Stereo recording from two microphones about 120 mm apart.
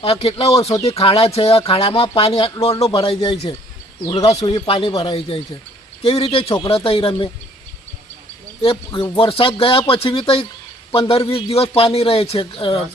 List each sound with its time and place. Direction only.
0.0 s speech: 55° left (ahead or behind)
9.0 s speech: 45° left (ahead or behind)